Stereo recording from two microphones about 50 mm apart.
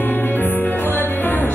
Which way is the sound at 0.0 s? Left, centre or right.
Left.